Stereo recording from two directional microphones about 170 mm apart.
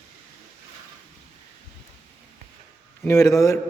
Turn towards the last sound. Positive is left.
turn(degrees=20)  # may be behind; listen again after turning